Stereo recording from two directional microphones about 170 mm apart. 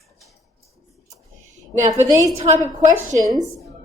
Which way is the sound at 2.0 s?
20° right (ahead or behind).